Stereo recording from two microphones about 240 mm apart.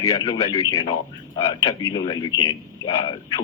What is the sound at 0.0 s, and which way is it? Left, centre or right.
A man's voice, centre.